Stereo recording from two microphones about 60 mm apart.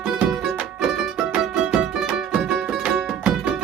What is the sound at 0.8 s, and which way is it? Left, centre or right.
Music, centre.